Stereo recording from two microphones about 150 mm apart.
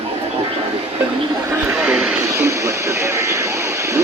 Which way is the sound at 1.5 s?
15° right (ahead or behind).